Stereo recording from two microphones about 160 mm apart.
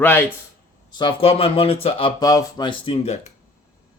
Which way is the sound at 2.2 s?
25° left (ahead or behind).